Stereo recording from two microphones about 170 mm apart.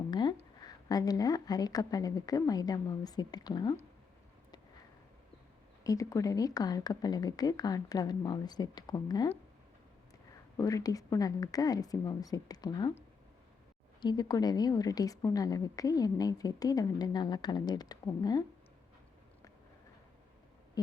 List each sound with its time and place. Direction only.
0.1 s a sound: 25° left (ahead or behind)
0.9 s a woman's voice: 20° left (ahead or behind)
5.8 s a woman's voice: 20° left (ahead or behind)
10.6 s a woman's voice: 20° left (ahead or behind)
14.0 s a woman's voice: 25° left (ahead or behind)